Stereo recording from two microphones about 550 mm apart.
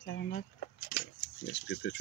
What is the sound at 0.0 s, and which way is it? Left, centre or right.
Keys jangling, centre.